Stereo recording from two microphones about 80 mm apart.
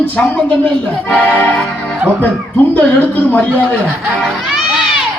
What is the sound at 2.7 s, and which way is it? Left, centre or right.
Speech, centre.